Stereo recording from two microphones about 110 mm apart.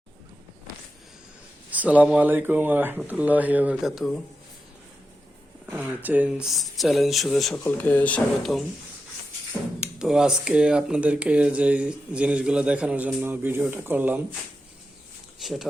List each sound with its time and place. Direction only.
1.7 s speech: 15° right (ahead or behind)
5.7 s speech: 15° right (ahead or behind); by 7.6 s centre (ahead or behind)
7.6 s speech: 15° left (ahead or behind)
9.8 s speech: 5° right (ahead or behind)
15.4 s speech: centre (ahead or behind)